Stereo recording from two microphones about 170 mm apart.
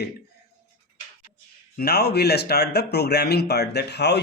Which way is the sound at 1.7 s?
70° left (ahead or behind).